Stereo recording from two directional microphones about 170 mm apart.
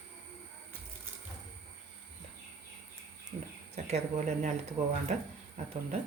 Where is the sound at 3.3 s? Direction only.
40° right (ahead or behind).